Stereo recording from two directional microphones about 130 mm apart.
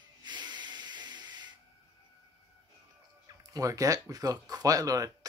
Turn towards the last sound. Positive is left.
turn(degrees=-25)  # may be behind; listen again after turning